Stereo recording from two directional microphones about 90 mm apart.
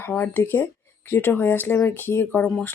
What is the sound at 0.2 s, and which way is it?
Speech, 20° left (ahead or behind).